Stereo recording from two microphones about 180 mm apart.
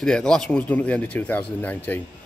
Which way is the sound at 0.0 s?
5° left (ahead or behind).